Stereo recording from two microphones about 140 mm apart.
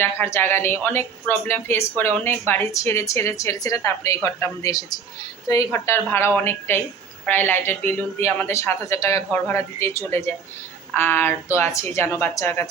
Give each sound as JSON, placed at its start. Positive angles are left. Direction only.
{"t": 0.0, "sound": "speech", "side_deg": 15}